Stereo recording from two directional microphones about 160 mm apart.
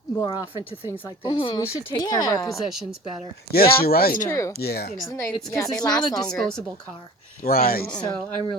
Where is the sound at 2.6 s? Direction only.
Centre (ahead or behind).